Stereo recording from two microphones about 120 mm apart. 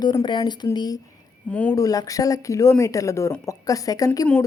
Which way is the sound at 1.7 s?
30° left (ahead or behind).